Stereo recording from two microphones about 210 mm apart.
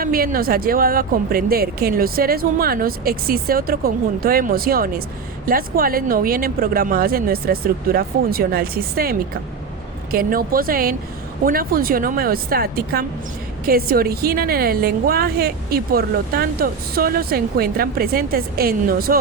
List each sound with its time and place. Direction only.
0.0 s a woman's voice: 45° right (ahead or behind)